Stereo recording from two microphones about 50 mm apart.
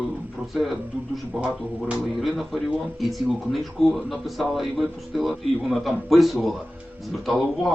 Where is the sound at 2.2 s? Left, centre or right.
Centre.